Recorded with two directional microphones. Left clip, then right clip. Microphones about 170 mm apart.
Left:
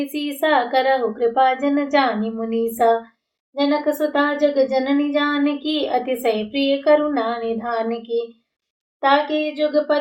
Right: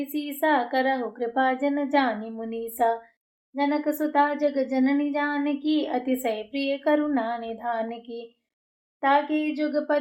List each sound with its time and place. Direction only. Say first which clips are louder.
0.0 s a woman's voice: left 5 dB; 40° right (ahead or behind)